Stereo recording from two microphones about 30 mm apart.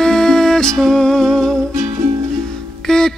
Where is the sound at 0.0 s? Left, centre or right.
Centre.